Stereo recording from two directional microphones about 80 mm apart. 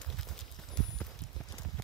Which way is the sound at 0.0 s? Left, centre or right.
Centre.